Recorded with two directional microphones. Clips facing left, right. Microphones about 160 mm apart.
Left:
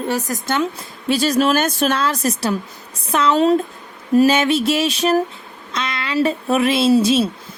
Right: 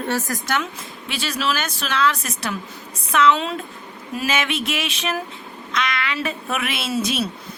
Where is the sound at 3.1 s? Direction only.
35° left (ahead or behind).